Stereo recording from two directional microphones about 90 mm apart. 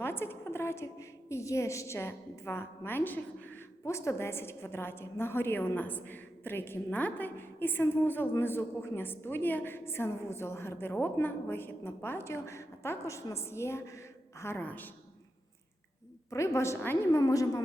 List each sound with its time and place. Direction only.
0.0 s a woman's voice: 25° left (ahead or behind)
3.8 s a woman's voice: 35° left (ahead or behind)
16.3 s a woman's voice: 35° left (ahead or behind)